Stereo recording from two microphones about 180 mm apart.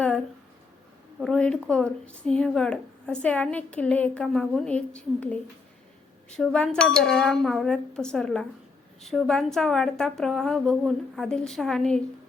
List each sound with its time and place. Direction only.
1.2 s a woman's voice: 5° left (ahead or behind)